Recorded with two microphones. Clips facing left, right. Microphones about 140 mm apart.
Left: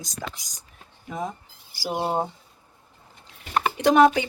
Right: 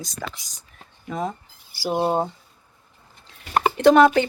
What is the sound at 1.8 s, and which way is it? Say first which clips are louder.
Speech: right 4 dB; 20° right (ahead or behind).